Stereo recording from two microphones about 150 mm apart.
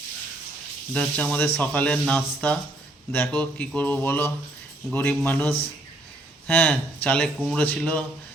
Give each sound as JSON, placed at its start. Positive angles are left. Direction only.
{"t": 0.9, "sound": "speech", "side_deg": 10}